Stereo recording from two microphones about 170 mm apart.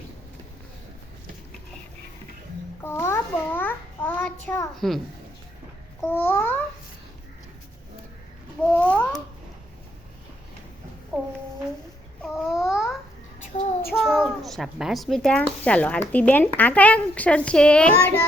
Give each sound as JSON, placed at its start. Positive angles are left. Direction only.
{"t": 2.8, "sound": "a sound", "side_deg": 15}
{"t": 4.7, "sound": "a child's voice", "side_deg": 0}
{"t": 6.1, "sound": "speech", "side_deg": 10}
{"t": 8.6, "sound": "speech", "side_deg": 5}
{"t": 12.2, "sound": "babbling", "side_deg": 0}
{"t": 13.5, "sound": "child singing", "side_deg": 50}
{"t": 14.0, "sound": "speech", "side_deg": 0}